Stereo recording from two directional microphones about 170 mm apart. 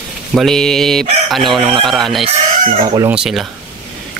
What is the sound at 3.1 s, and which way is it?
Speech, centre (ahead or behind).